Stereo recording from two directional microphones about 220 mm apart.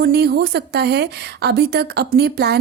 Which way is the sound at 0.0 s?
45° right (ahead or behind).